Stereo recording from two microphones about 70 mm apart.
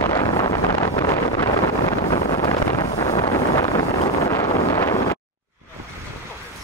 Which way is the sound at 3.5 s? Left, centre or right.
Left.